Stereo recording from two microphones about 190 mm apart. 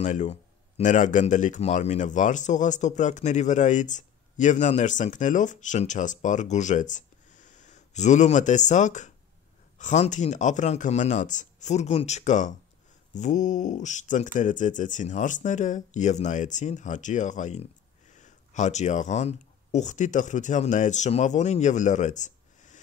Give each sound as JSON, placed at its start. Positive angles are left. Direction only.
{"t": 0.0, "sound": "speech", "side_deg": 40}